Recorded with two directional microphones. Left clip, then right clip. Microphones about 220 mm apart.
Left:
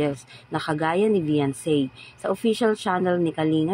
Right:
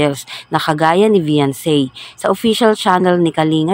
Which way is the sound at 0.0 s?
40° right (ahead or behind).